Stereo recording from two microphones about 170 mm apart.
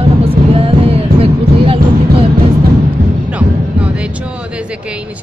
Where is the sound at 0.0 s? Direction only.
35° right (ahead or behind).